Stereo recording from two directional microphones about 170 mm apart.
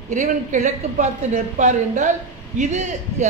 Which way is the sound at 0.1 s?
45° right (ahead or behind).